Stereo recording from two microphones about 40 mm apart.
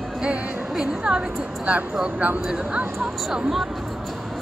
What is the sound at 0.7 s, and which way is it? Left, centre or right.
Speech, right.